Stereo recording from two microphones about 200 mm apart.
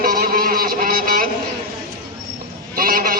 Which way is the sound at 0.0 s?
45° right (ahead or behind).